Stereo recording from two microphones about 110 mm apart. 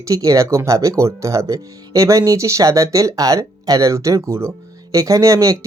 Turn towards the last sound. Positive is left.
turn(degrees=-30)  # may be behind; listen again after turning